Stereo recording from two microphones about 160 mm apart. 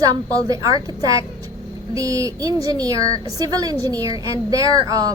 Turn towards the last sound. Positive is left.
turn(degrees=-20)  # may be behind; listen again after turning